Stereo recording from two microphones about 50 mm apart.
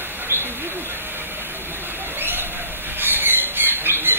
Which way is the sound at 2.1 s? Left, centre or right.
Right.